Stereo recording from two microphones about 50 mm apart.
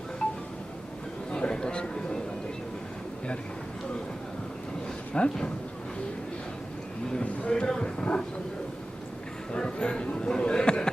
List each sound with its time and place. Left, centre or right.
0.2 s wind chime: centre
1.3 s a sound: centre
5.1 s speech: centre
7.1 s speech: centre
9.5 s speech: centre